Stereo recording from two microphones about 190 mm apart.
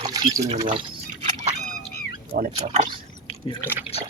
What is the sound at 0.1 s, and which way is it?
Liquid, 20° right (ahead or behind).